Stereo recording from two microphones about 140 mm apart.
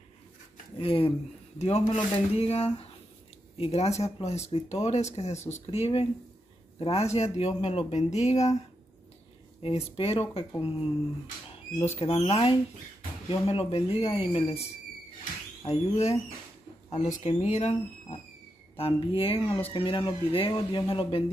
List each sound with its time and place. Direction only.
0.7 s speech: 40° left (ahead or behind)
9.6 s speech: 45° left (ahead or behind)
11.7 s speech: 50° left (ahead or behind)
17.2 s speech: 50° left (ahead or behind)
18.8 s speech: 40° left (ahead or behind)